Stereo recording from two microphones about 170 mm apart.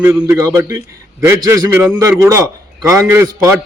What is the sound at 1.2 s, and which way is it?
A man's voice, 15° right (ahead or behind).